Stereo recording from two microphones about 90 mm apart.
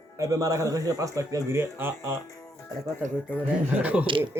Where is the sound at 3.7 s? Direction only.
15° right (ahead or behind).